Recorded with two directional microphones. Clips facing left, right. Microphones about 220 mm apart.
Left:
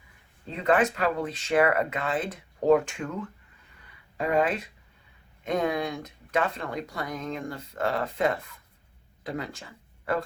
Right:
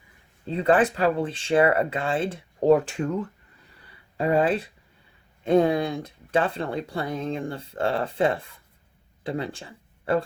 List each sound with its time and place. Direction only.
0.5 s speech: 30° right (ahead or behind)
3.8 s a sound: 30° right (ahead or behind)
5.4 s speech: 30° right (ahead or behind)